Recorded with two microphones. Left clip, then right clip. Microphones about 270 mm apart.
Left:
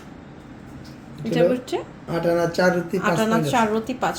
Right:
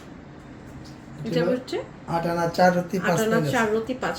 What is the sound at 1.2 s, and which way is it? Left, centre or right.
Speech, left.